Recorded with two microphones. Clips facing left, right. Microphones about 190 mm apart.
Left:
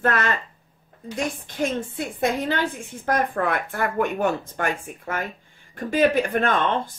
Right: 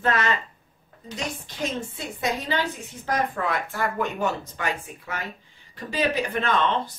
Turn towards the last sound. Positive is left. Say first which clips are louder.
# left 2 dB
turn(degrees=50)  # may be behind; listen again after turning